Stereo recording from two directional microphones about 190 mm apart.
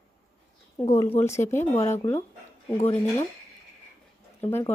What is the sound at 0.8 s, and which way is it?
Speech, 15° left (ahead or behind).